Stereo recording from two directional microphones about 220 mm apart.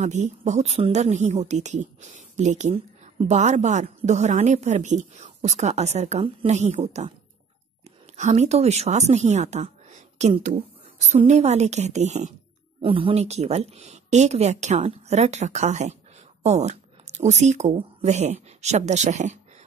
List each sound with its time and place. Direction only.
0.0 s speech: 30° right (ahead or behind)
8.2 s speech: 30° right (ahead or behind)